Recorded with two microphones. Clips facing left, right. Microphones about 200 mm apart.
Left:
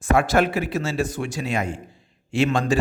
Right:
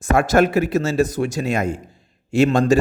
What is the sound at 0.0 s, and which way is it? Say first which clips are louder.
A man's voice: right 3 dB; 45° right (ahead or behind).